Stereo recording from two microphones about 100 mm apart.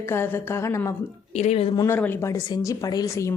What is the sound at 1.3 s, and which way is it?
Speech, 90° left.